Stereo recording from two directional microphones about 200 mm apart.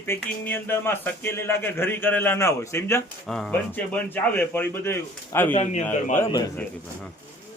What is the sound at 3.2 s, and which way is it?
A man's voice, centre (ahead or behind).